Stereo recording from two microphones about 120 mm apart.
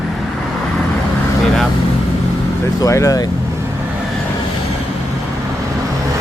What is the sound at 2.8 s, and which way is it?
Speech, 25° left (ahead or behind).